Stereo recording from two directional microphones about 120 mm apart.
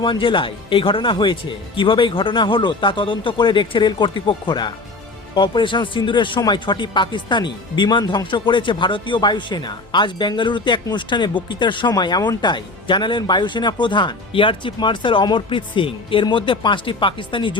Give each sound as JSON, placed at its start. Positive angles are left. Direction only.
{"t": 0.0, "sound": "speech", "side_deg": 45}